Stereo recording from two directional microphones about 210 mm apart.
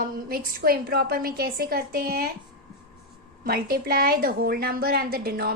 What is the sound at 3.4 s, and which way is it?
A woman's voice, 45° right (ahead or behind).